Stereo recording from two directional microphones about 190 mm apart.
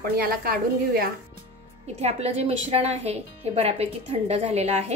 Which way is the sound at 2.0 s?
35° right (ahead or behind).